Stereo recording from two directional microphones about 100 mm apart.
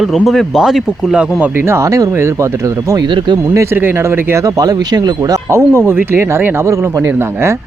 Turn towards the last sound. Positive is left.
turn(degrees=-25)  # may be behind; listen again after turning